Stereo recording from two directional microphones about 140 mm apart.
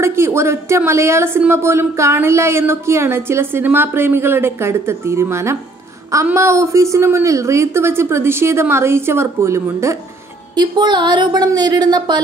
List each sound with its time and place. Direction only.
0.0 s speech: 20° right (ahead or behind)
10.5 s speech: 30° right (ahead or behind)